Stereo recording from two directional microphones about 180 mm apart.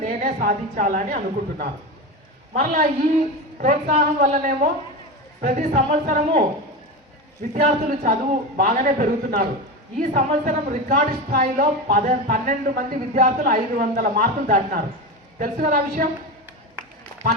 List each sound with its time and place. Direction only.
0.0 s a woman's voice: 45° right (ahead or behind)
7.5 s a woman's voice: 45° right (ahead or behind)